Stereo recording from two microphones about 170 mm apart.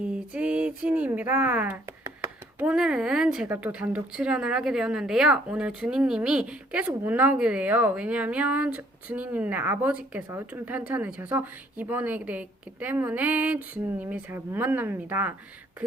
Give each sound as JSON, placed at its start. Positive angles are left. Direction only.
{"t": 0.0, "sound": "speech", "side_deg": -5}
{"t": 15.8, "sound": "beatboxing", "side_deg": -5}